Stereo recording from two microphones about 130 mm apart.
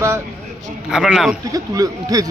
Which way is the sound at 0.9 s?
5° right (ahead or behind).